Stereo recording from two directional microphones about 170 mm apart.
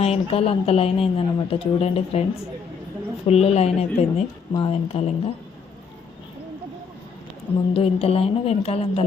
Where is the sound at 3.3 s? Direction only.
35° left (ahead or behind).